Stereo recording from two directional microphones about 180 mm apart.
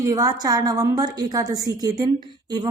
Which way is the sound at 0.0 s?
20° right (ahead or behind).